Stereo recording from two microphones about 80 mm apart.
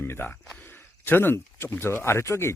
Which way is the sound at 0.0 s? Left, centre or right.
Left.